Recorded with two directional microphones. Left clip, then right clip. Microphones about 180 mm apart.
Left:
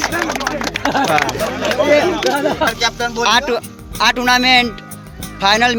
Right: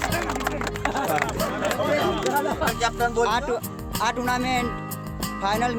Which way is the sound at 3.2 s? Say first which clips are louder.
Left 10 dB; 10° right (ahead or behind).